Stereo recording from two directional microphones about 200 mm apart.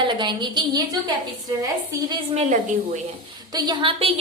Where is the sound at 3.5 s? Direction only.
20° right (ahead or behind).